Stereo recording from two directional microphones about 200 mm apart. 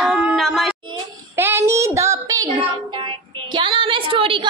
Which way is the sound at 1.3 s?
10° right (ahead or behind).